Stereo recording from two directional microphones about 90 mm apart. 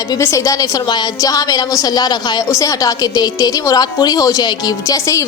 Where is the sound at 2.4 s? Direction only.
40° left (ahead or behind).